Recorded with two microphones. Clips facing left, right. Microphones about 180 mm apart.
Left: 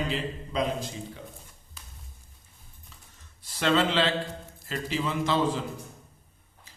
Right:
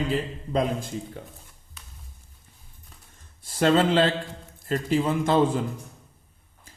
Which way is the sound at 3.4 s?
45° right (ahead or behind).